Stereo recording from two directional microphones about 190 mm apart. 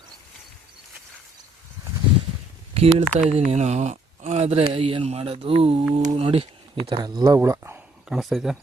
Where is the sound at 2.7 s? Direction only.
30° right (ahead or behind).